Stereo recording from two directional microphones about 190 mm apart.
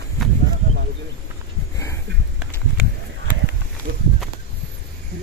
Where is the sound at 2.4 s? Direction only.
5° right (ahead or behind).